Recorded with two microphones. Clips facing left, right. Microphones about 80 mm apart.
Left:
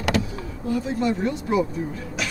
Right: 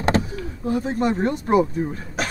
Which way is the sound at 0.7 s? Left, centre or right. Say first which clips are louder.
Right 2 dB; right.